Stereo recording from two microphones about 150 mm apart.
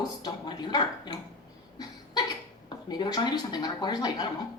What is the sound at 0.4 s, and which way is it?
Speech, 30° left (ahead or behind).